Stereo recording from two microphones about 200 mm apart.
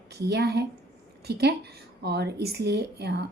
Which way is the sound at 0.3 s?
55° right (ahead or behind).